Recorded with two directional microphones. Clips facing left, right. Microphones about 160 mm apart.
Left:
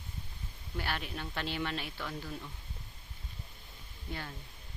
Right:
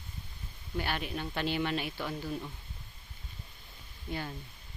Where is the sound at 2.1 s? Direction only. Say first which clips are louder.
Right 5 dB; 20° right (ahead or behind).